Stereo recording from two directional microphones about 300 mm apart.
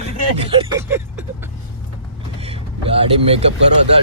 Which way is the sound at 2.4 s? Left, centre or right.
Centre.